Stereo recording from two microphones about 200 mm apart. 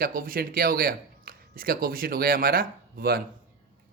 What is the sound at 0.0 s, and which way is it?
Speech, 45° right (ahead or behind).